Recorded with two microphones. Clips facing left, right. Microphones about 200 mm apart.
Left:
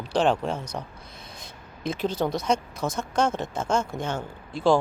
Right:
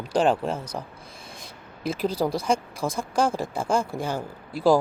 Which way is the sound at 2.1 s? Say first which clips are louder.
Right 1 dB; 30° right (ahead or behind).